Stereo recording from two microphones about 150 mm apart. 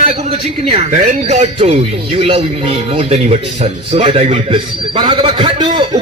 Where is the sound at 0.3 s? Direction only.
40° right (ahead or behind).